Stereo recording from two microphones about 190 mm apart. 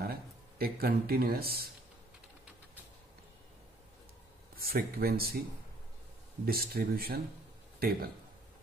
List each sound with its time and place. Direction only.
0.0 s speech: 55° right (ahead or behind)
4.6 s speech: 50° right (ahead or behind)
6.4 s speech: 50° right (ahead or behind)